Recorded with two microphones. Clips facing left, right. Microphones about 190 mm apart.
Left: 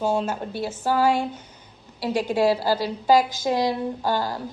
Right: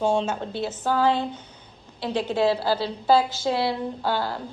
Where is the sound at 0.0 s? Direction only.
5° left (ahead or behind).